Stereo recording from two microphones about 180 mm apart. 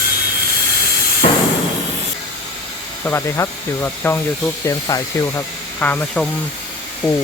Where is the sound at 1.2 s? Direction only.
35° left (ahead or behind).